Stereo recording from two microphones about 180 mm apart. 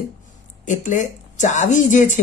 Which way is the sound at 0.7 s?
45° left (ahead or behind).